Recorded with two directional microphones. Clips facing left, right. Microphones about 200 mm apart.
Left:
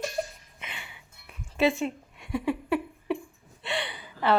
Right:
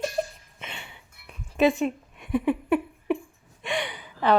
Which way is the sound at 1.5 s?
15° right (ahead or behind).